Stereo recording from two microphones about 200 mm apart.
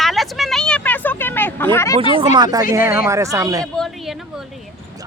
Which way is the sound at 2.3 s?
20° right (ahead or behind).